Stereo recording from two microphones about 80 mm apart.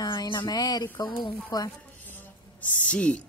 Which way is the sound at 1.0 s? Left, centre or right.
Left.